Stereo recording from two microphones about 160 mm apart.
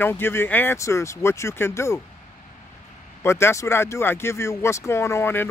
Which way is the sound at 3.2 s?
15° left (ahead or behind).